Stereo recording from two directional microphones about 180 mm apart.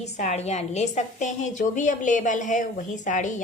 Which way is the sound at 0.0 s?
40° left (ahead or behind).